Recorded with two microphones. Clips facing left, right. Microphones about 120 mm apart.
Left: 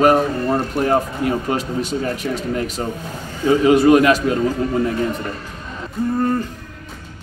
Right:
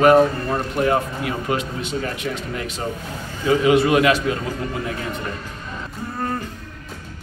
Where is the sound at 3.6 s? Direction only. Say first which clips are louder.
Left 4 dB; 40° left (ahead or behind).